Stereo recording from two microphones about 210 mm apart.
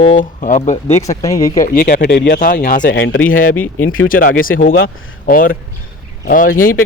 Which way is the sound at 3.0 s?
70° left (ahead or behind).